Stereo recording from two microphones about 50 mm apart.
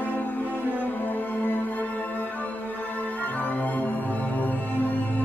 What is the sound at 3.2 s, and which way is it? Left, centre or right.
Music, left.